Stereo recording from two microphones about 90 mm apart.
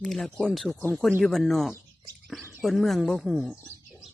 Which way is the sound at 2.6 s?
Centre (ahead or behind).